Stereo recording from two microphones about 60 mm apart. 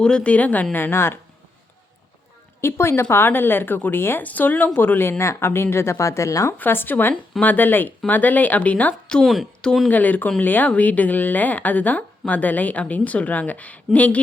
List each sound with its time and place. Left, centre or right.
0.0 s speech: centre; by 1.2 s left
2.6 s speech: left
6.6 s speech: left
9.2 s speech: centre
9.9 s speech: left